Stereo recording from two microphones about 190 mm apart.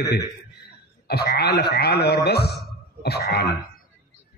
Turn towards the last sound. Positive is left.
turn(degrees=55)  # may be behind; listen again after turning